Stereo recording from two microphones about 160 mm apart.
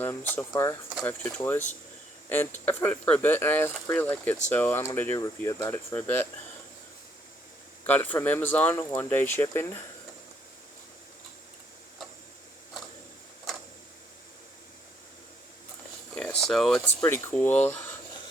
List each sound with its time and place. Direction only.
0.0 s speech: 10° left (ahead or behind)
7.9 s speech: 10° left (ahead or behind)
16.1 s a sound: 5° left (ahead or behind)
17.0 s speech: 15° left (ahead or behind)